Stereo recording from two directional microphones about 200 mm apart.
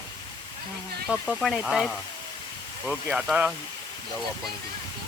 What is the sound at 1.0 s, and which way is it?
Speech, centre (ahead or behind).